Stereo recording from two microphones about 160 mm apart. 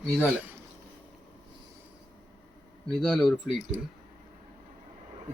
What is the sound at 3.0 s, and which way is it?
Speech, 5° left (ahead or behind).